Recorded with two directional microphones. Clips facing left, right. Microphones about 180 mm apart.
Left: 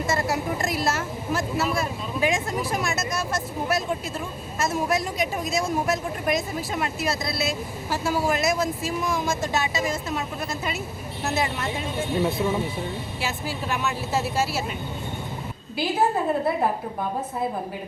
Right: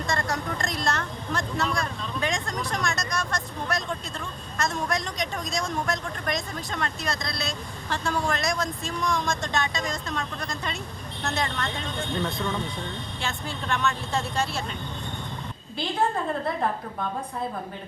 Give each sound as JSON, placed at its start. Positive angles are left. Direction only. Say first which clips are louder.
{"t": 0.0, "sound": "speech", "louder": "left 4 dB", "side_deg": 5}
{"t": 15.8, "sound": "a woman's voice", "louder": "left 3 dB", "side_deg": 5}